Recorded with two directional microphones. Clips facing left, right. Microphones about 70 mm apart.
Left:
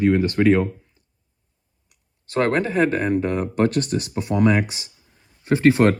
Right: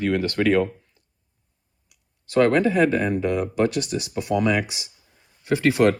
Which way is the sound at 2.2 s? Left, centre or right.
Left.